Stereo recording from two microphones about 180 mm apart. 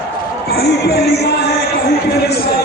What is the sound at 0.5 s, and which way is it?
Speech, 65° left (ahead or behind).